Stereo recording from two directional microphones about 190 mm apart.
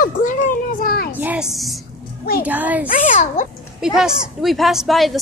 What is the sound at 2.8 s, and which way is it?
Speech, 45° left (ahead or behind).